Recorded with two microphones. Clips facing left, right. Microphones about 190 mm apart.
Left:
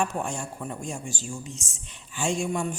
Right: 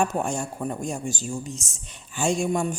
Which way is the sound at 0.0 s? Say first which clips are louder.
Right 4 dB; 45° right (ahead or behind).